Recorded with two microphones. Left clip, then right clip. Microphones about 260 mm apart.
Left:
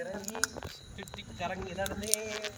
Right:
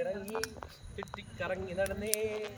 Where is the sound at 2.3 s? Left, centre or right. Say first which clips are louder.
Left 1 dB; centre.